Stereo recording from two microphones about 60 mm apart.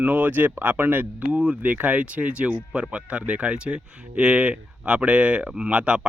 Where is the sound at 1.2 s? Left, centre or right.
Centre.